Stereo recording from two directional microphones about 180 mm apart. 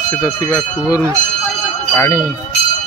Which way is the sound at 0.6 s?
20° left (ahead or behind).